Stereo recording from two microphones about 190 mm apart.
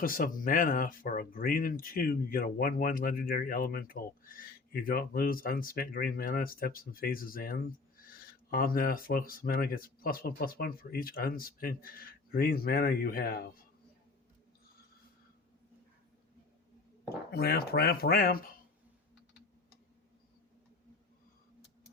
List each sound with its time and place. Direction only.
0.0 s speech: 45° left (ahead or behind)
17.3 s speech: 55° left (ahead or behind)